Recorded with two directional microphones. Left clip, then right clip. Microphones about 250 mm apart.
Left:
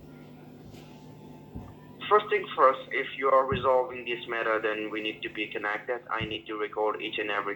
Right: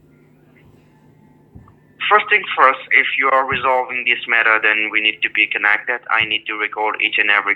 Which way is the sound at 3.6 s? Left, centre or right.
Right.